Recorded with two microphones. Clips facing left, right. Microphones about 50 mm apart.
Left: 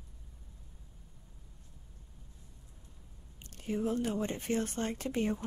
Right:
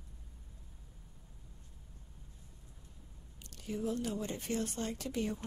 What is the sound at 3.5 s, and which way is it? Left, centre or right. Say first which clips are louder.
A woman's voice: left 4 dB; left.